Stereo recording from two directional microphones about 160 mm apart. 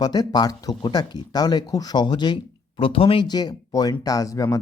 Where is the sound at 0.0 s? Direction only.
25° left (ahead or behind).